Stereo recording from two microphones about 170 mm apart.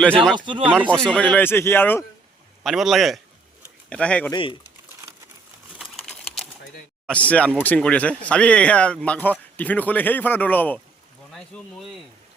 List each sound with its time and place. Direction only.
0.3 s speech: 30° right (ahead or behind)
0.9 s speech: 5° left (ahead or behind)
2.6 s speech: centre (ahead or behind)
4.3 s speech: 30° left (ahead or behind)
5.8 s a sound: centre (ahead or behind)
7.1 s speech: 10° left (ahead or behind)